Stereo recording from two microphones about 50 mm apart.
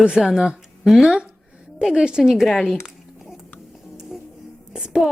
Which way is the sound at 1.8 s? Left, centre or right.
Centre.